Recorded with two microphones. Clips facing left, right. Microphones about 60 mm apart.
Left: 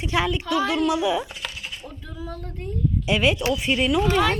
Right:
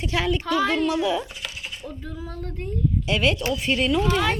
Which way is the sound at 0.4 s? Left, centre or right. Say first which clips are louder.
Even; right.